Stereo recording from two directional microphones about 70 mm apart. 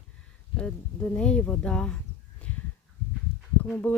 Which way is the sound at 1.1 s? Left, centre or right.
Centre.